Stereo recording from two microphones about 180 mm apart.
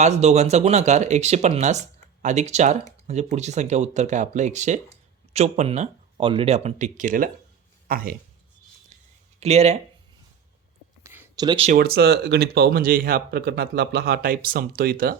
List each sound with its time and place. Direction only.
0.0 s speech: 40° right (ahead or behind); by 8.1 s 55° right (ahead or behind)
9.4 s speech: 35° right (ahead or behind)
11.0 s a sound: 20° right (ahead or behind)
11.8 s speech: 60° right (ahead or behind)